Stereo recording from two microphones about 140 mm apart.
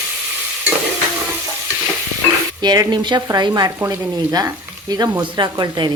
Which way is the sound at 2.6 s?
30° right (ahead or behind).